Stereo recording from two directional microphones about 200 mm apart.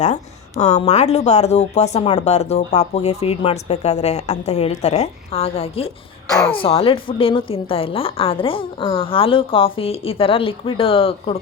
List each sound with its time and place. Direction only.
0.6 s speech: 35° left (ahead or behind)
6.2 s a woman's voice: 15° left (ahead or behind)